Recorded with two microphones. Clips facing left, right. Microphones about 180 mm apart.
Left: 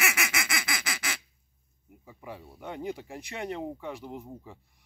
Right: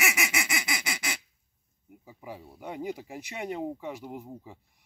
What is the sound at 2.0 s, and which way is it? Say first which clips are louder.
Speech: even; 10° right (ahead or behind).